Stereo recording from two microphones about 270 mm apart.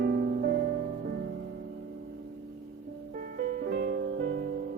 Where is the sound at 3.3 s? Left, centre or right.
Right.